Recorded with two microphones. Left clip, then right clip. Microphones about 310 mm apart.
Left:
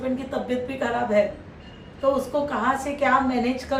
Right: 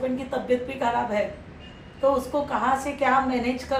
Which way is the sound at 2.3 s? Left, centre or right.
Centre.